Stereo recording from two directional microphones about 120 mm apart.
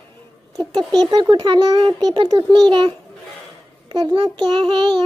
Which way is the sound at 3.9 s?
45° right (ahead or behind).